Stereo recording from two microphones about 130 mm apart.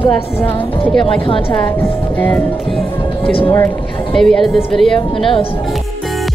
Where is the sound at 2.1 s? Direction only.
15° left (ahead or behind).